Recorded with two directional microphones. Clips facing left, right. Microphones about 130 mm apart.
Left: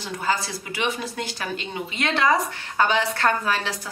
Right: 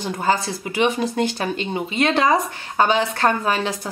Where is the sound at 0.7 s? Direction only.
20° right (ahead or behind).